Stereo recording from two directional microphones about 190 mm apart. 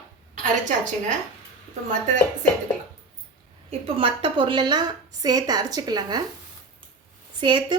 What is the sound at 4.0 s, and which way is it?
Speech, 30° right (ahead or behind).